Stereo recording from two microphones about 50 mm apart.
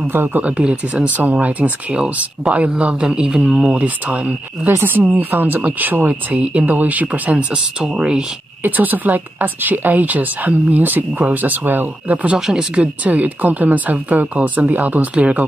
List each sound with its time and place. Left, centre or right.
0.0 s speech: right
0.4 s speech: right
2.4 s a man's voice: centre
2.8 s a man's voice: right
3.7 s speech: right
4.6 s speech: right; by 8.3 s centre
8.6 s speech: right
12.4 s a man's voice: centre
12.7 s speech: right